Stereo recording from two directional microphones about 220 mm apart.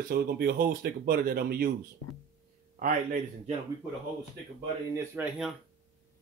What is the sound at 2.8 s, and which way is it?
Speech, 40° right (ahead or behind).